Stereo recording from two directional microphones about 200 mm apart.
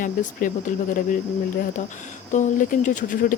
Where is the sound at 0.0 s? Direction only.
40° left (ahead or behind).